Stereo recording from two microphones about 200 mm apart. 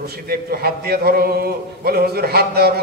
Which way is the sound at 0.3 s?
50° right (ahead or behind).